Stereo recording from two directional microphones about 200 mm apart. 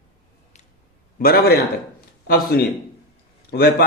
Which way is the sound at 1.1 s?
50° left (ahead or behind).